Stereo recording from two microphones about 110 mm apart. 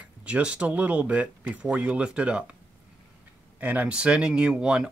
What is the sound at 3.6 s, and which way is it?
Speech, 15° right (ahead or behind).